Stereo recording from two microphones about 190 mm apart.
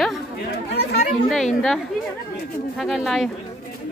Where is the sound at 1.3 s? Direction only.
Centre (ahead or behind).